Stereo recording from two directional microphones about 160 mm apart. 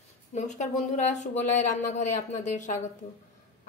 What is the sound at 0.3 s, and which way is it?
A woman's voice, 45° left (ahead or behind).